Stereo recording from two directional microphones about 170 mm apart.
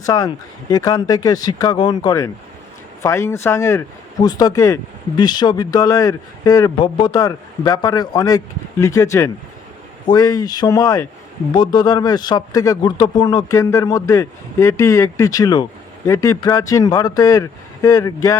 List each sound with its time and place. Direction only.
0.0 s speech: 20° left (ahead or behind)